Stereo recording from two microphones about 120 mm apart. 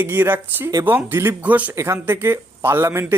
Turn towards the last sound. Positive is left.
turn(degrees=-20)  # may be behind; listen again after turning